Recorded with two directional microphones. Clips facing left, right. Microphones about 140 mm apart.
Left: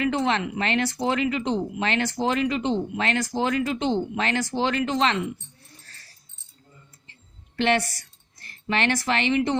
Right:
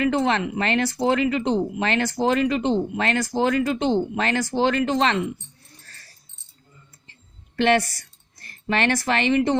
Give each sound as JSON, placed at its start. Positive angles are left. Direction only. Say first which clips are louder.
{"t": 0.0, "sound": "speech", "louder": "right 3 dB", "side_deg": -40}
{"t": 7.5, "sound": "a woman's voice", "louder": "right 3 dB", "side_deg": -45}